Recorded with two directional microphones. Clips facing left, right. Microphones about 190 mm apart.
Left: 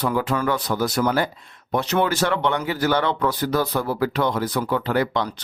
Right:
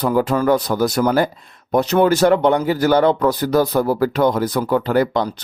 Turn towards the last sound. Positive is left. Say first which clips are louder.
# right 5 dB
turn(degrees=-40)  # may be behind; listen again after turning